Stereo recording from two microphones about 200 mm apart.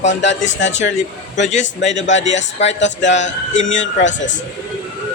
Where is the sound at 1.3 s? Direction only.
35° left (ahead or behind).